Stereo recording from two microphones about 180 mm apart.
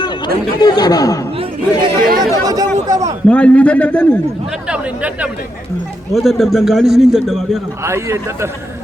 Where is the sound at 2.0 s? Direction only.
55° right (ahead or behind).